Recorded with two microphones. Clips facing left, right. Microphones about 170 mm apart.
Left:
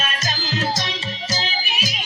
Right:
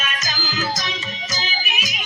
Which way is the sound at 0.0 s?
30° left (ahead or behind).